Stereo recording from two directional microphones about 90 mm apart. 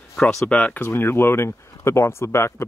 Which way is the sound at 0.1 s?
5° left (ahead or behind).